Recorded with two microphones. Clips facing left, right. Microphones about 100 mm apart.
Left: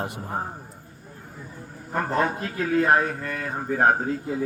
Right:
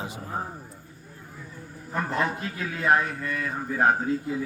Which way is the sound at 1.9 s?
45° left (ahead or behind).